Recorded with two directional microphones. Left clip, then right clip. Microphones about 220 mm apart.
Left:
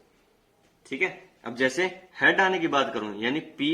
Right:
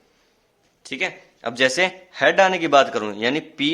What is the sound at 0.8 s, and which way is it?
Speech, 50° right (ahead or behind).